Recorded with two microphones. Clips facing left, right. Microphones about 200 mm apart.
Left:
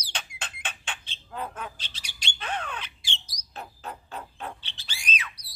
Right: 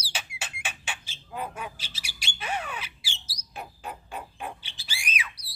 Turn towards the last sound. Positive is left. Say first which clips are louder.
# even
turn(degrees=-10)  # may be behind; listen again after turning